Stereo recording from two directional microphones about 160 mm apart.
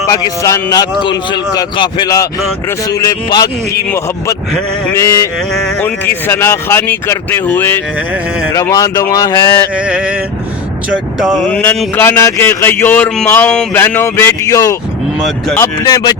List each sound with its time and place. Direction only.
0.2 s speech: 20° left (ahead or behind)
5.0 s speech: 15° left (ahead or behind)
5.5 s speech: 5° left (ahead or behind)
6.2 s speech: 15° left (ahead or behind)
9.7 s a sound: 5° right (ahead or behind)
11.2 s speech: centre (ahead or behind); by 16.1 s 25° left (ahead or behind)